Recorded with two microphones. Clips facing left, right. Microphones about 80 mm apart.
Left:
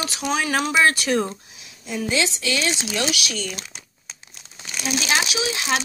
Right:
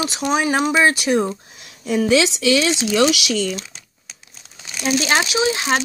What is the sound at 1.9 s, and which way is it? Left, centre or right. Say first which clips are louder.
Speech: right 8 dB; right.